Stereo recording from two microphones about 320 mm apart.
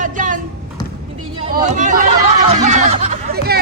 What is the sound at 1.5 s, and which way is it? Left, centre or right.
Speech, right.